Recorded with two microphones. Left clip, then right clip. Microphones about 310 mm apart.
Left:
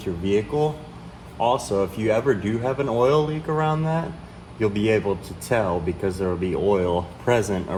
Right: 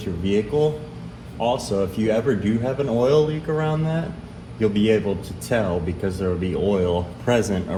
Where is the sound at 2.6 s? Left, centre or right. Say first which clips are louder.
Even; centre.